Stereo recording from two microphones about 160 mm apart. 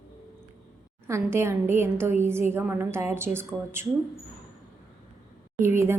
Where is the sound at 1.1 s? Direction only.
15° right (ahead or behind).